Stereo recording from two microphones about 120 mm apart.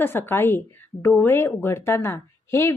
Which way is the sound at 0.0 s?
20° left (ahead or behind).